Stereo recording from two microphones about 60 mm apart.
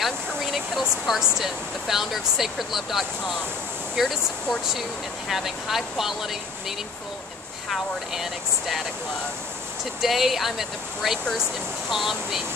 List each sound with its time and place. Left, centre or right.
0.0 s speech: centre
7.7 s speech: centre
10.0 s speech: centre